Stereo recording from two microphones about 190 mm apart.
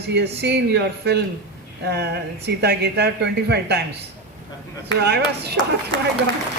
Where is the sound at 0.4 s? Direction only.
60° right (ahead or behind).